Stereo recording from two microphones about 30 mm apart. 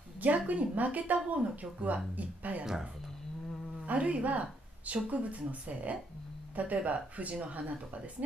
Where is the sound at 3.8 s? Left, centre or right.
Right.